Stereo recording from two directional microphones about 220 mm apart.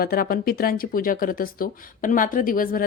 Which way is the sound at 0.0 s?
40° left (ahead or behind).